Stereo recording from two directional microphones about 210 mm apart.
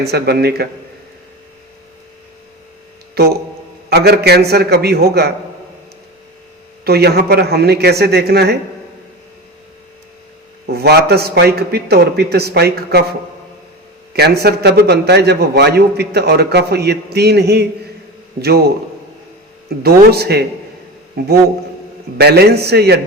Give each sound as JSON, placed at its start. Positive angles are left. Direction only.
{"t": 0.0, "sound": "a man's voice", "side_deg": -50}
{"t": 3.2, "sound": "a man's voice", "side_deg": -50}
{"t": 6.8, "sound": "a man's voice", "side_deg": -50}
{"t": 10.7, "sound": "a man's voice", "side_deg": -50}
{"t": 14.1, "sound": "a man's voice", "side_deg": -50}
{"t": 19.8, "sound": "a man's voice", "side_deg": -50}
{"t": 22.2, "sound": "a man's voice", "side_deg": -50}